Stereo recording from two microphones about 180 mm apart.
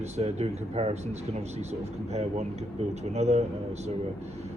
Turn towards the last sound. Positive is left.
turn(degrees=-35)  # may be behind; listen again after turning